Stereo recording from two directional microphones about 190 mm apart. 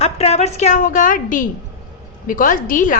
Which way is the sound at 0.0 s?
35° left (ahead or behind).